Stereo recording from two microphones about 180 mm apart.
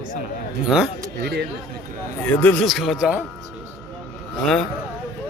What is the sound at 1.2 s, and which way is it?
Speech, 65° right (ahead or behind).